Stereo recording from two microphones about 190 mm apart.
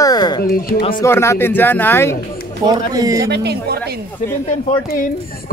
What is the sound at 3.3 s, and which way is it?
Speech, 60° right (ahead or behind).